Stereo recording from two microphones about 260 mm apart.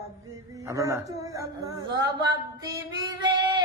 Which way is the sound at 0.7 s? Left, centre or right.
Centre.